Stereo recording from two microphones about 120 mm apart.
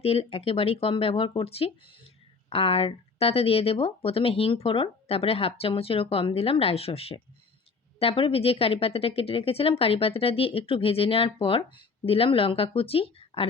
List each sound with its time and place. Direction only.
0.0 s speech: 55° left (ahead or behind)